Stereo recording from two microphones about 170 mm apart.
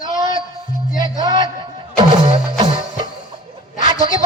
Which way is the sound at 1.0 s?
25° right (ahead or behind).